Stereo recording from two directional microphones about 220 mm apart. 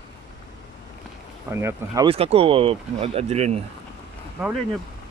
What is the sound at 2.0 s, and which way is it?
Speech, 25° right (ahead or behind).